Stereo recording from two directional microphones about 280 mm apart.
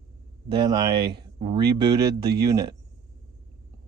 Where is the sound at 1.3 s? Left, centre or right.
Centre.